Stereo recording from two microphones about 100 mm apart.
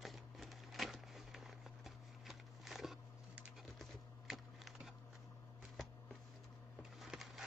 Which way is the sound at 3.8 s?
5° right (ahead or behind).